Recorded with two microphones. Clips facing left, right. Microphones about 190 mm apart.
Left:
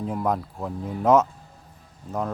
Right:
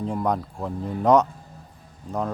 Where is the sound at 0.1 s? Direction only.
Centre (ahead or behind).